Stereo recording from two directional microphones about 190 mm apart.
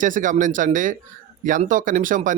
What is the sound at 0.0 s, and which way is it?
Speech, 45° right (ahead or behind).